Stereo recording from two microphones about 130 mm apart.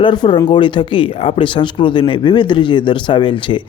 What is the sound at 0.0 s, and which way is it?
Speech, 35° left (ahead or behind).